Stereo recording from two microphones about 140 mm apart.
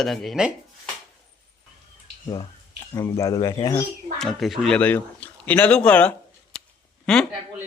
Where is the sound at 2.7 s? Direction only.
20° left (ahead or behind).